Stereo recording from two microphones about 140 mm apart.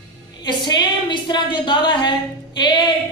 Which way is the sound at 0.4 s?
30° left (ahead or behind).